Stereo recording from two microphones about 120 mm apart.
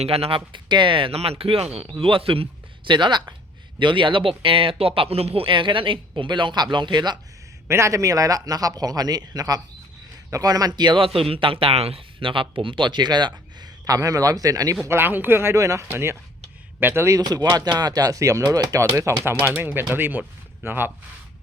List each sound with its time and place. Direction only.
0.0 s speech: 55° right (ahead or behind); by 7.2 s 35° right (ahead or behind)
7.7 s a man's voice: 25° right (ahead or behind)
14.8 s speech: 20° right (ahead or behind)